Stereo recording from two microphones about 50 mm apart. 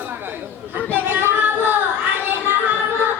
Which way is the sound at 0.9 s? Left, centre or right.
Right.